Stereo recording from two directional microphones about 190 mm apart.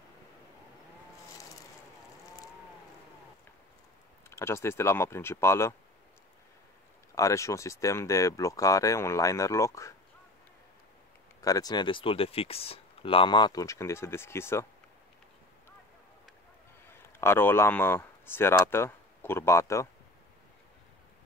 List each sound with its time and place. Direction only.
4.3 s speech: 15° left (ahead or behind)
7.2 s speech: 15° left (ahead or behind)
11.4 s speech: 20° left (ahead or behind)
17.2 s speech: 10° left (ahead or behind)